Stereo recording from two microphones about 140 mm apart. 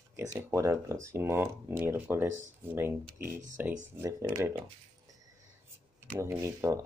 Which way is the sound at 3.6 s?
15° right (ahead or behind).